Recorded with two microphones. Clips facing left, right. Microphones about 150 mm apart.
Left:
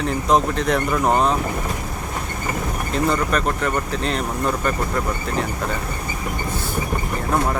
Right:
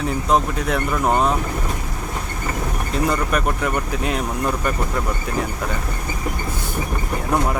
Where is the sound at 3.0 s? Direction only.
10° right (ahead or behind).